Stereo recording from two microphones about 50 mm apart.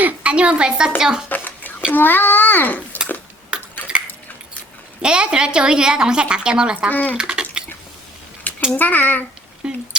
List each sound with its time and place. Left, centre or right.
0.0 s a woman's voice: right; by 1.2 s centre
1.3 s dishes: left
1.9 s a child's voice: left
3.5 s cutlery: centre
5.0 s a woman's voice: centre
6.9 s a child's voice: left
7.2 s a sound: centre
8.7 s a child's voice: left
9.6 s a woman's voice: centre